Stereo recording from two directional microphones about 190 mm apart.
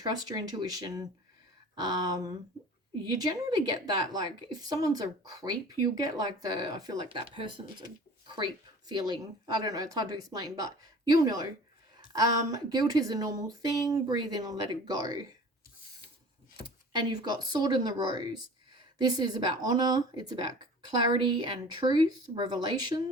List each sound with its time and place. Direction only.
0.0 s speech: 20° right (ahead or behind)
8.9 s speech: 20° right (ahead or behind)
17.0 s speech: 20° right (ahead or behind)